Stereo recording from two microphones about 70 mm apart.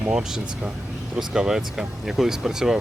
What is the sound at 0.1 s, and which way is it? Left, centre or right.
Speech, centre.